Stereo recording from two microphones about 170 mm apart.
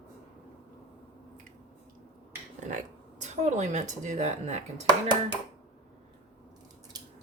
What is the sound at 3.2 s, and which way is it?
Speech, 45° right (ahead or behind).